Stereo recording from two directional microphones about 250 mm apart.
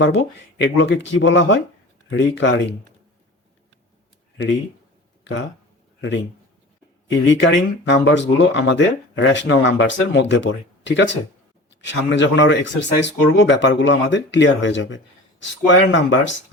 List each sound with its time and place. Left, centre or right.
0.0 s speech: left
7.1 s speech: left